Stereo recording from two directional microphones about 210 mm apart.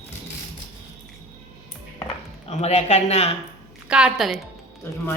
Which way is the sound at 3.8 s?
5° right (ahead or behind).